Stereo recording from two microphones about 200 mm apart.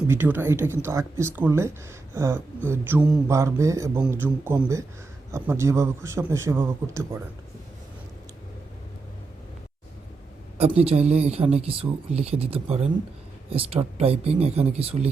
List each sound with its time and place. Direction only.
0.1 s speech: 10° right (ahead or behind)
10.6 s speech: 30° right (ahead or behind)